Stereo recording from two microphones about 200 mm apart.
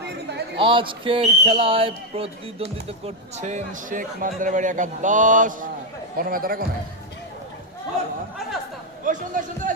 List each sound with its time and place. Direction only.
0.6 s speech: 25° right (ahead or behind); by 6.7 s 45° right (ahead or behind)
9.0 s speech: 40° right (ahead or behind)